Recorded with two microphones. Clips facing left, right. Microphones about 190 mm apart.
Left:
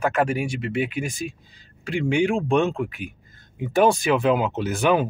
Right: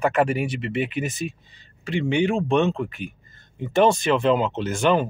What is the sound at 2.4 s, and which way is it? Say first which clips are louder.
Speech: even; 10° left (ahead or behind).